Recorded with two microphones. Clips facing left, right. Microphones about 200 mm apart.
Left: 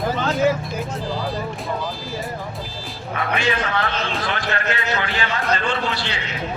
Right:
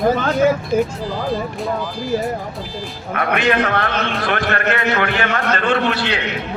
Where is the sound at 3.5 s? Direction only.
60° right (ahead or behind).